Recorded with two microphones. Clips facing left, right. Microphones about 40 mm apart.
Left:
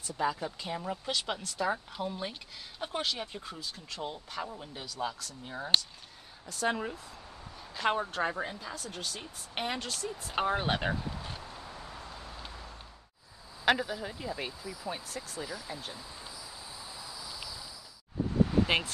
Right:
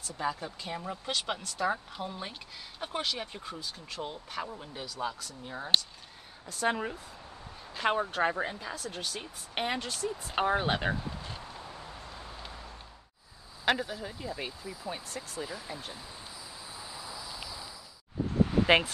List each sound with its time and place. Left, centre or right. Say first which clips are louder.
0.2 s speech: left 2 dB; centre
1.0 s speech: even; centre
6.4 s speech: right 1 dB; centre
8.2 s speech: right 3 dB; right; by 11.0 s centre
11.1 s a sound: even; left
11.9 s vehicle: even; centre
13.7 s speech: left 1 dB; centre
14.6 s speech: even; right
14.9 s speech: even; centre
15.4 s speech: even; right
16.9 s a sound: right 2 dB; right
18.5 s a sound: right 4 dB; centre